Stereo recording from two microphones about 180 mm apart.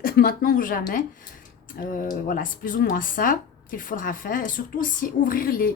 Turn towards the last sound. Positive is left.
turn(degrees=55)  # may be behind; listen again after turning